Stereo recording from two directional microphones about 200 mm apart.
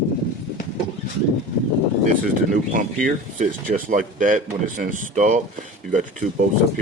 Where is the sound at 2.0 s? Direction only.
40° right (ahead or behind).